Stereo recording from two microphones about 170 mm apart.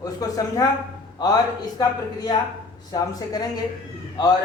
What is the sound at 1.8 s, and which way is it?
A man's voice, 25° left (ahead or behind).